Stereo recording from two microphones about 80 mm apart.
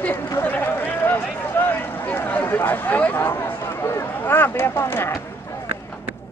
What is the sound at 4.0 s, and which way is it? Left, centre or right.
Speech, left.